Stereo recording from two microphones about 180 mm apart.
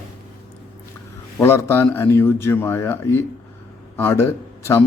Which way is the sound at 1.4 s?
10° left (ahead or behind).